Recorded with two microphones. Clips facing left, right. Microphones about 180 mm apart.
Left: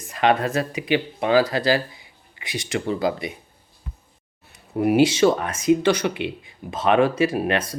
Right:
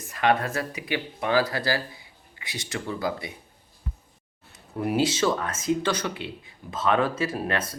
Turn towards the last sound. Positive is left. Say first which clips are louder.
# left 6 dB
turn(degrees=15)  # may be behind; listen again after turning